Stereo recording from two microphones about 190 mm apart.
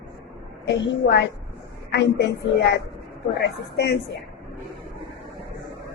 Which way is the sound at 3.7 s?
65° left (ahead or behind).